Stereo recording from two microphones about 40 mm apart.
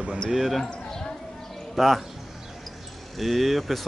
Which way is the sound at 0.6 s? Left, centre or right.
Centre.